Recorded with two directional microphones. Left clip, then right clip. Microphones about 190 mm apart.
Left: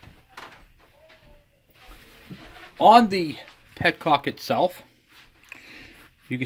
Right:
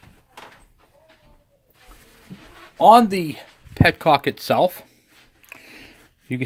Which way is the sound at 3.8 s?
45° right (ahead or behind).